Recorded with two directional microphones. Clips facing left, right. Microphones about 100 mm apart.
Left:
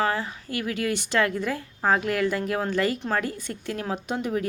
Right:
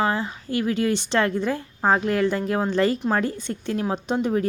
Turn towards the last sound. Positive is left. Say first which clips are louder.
# right 5 dB
turn(degrees=-30)  # may be behind; listen again after turning